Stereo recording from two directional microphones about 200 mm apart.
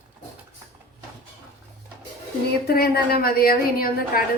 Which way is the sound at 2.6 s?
50° left (ahead or behind).